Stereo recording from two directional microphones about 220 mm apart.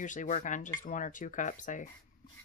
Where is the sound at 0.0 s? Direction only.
35° left (ahead or behind).